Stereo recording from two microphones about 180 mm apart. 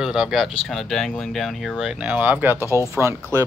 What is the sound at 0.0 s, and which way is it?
Speech, 5° right (ahead or behind).